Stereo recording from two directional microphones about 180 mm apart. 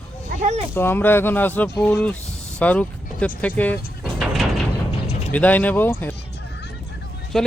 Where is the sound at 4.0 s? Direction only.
Centre (ahead or behind).